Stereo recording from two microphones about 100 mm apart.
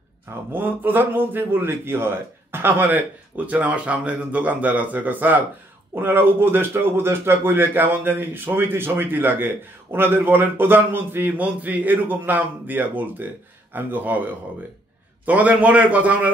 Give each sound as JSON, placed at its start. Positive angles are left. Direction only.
{"t": 0.3, "sound": "a man's voice", "side_deg": -20}